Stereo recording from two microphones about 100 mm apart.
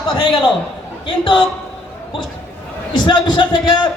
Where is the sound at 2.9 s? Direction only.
50° left (ahead or behind).